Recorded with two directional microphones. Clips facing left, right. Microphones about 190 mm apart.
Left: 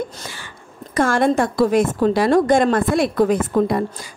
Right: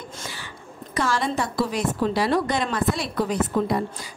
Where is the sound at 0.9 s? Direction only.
50° left (ahead or behind).